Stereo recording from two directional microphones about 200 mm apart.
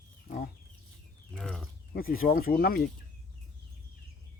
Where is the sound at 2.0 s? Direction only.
45° left (ahead or behind).